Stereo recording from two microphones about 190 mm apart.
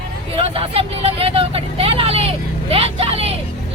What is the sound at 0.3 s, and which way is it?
Speech, 30° right (ahead or behind).